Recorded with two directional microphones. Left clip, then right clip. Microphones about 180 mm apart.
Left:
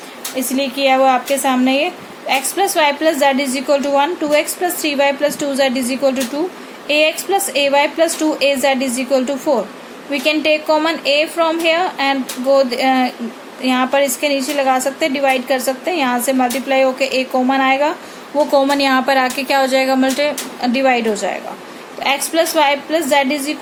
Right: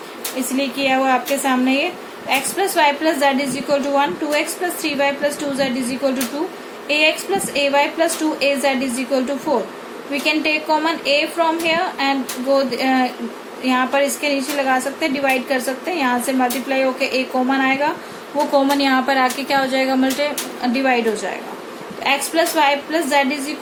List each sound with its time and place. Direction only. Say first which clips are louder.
0.5 s a woman's voice: left 4 dB; 50° left (ahead or behind)